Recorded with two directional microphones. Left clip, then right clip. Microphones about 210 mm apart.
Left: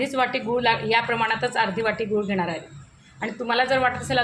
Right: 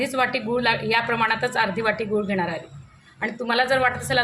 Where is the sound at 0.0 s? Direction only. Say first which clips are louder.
Right 1 dB; centre (ahead or behind).